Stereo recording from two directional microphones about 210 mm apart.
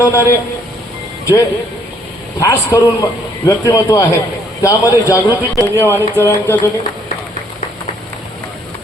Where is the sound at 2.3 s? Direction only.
15° left (ahead or behind).